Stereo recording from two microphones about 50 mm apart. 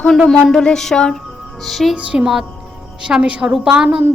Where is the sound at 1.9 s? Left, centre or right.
Right.